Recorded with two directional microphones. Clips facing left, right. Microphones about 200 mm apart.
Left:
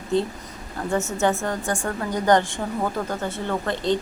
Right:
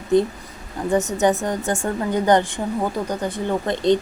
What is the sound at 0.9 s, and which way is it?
A woman's voice, 15° right (ahead or behind).